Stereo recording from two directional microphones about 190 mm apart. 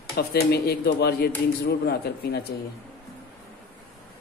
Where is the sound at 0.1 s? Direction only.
55° left (ahead or behind).